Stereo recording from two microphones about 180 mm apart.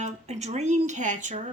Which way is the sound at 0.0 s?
40° right (ahead or behind).